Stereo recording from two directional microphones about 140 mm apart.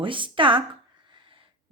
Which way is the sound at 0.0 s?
35° right (ahead or behind).